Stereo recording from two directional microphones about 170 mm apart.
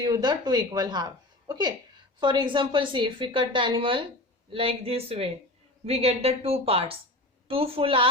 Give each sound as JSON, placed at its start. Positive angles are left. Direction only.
{"t": 0.0, "sound": "a woman's voice", "side_deg": -25}